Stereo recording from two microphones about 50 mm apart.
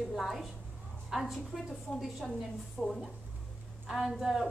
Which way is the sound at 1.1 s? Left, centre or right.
Centre.